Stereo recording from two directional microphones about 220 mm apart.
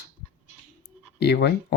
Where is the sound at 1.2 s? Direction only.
50° left (ahead or behind).